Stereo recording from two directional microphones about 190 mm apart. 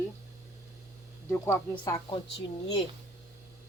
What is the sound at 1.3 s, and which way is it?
Speech, 15° left (ahead or behind).